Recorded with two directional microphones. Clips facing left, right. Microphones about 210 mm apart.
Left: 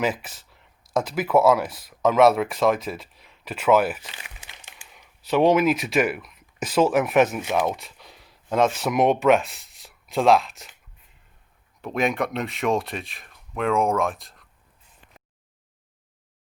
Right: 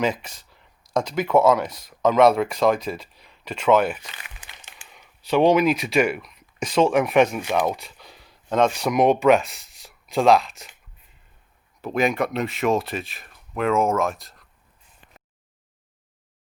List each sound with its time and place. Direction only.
0.0 s speech: 5° left (ahead or behind)
4.0 s crumpling: 25° left (ahead or behind)
4.9 s speech: centre (ahead or behind)
11.8 s speech: centre (ahead or behind)